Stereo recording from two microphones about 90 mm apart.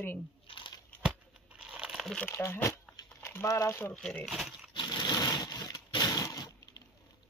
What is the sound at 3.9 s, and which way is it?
Speech, 15° left (ahead or behind).